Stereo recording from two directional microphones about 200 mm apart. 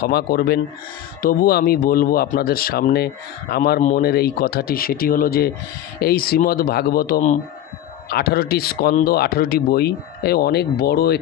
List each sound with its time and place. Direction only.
0.0 s speech: 50° left (ahead or behind)